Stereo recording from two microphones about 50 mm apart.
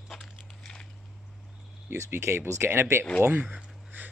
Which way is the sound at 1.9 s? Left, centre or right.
Right.